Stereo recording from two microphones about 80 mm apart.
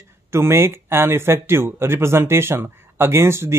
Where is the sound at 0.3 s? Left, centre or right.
Right.